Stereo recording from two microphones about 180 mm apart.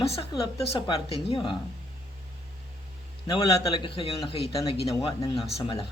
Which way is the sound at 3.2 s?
25° left (ahead or behind).